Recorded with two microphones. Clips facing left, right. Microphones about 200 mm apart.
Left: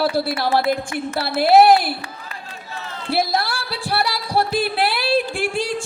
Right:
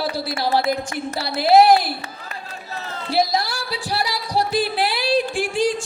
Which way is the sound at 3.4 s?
60° left (ahead or behind).